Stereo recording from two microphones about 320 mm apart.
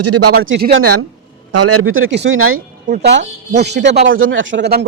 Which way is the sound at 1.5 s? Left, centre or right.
Right.